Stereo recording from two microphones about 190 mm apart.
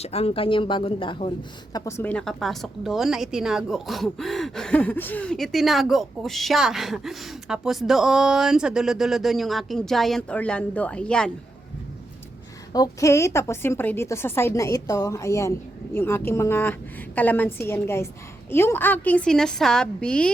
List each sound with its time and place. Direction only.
0.0 s speech: 30° left (ahead or behind)
1.7 s a woman's voice: 15° left (ahead or behind)
12.7 s a woman's voice: 20° left (ahead or behind)